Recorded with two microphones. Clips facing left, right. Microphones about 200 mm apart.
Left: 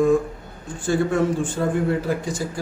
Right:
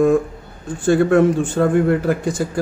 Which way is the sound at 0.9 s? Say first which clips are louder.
Right 7 dB; 60° right (ahead or behind).